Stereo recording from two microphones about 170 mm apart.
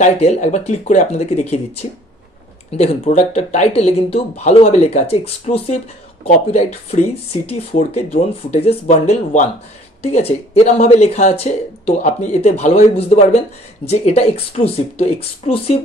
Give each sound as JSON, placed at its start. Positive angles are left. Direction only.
{"t": 0.0, "sound": "speech", "side_deg": 45}